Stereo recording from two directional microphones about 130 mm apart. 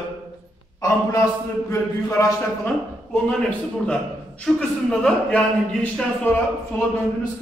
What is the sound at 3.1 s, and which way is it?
A man's voice, 10° left (ahead or behind).